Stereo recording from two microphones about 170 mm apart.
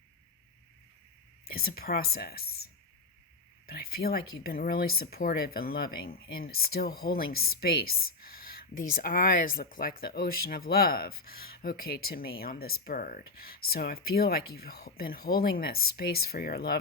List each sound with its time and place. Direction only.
1.5 s speech: 65° left (ahead or behind)
3.7 s speech: 65° left (ahead or behind)